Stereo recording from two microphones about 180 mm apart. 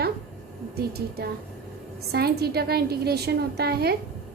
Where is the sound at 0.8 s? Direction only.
60° right (ahead or behind).